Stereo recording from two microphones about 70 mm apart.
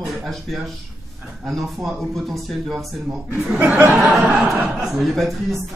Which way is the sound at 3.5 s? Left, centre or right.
Right.